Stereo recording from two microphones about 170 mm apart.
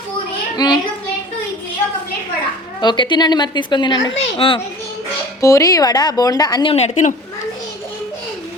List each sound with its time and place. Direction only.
0.5 s a child's voice: 25° left (ahead or behind)
2.8 s a woman's voice: 25° left (ahead or behind)
5.4 s a woman's voice: 20° left (ahead or behind); by 7.1 s 45° left (ahead or behind)